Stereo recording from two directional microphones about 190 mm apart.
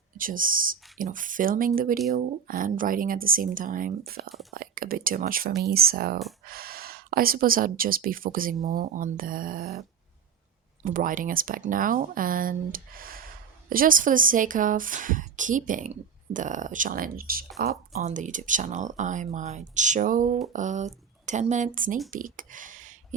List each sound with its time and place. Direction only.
0.2 s speech: 45° right (ahead or behind)
10.8 s speech: 45° right (ahead or behind)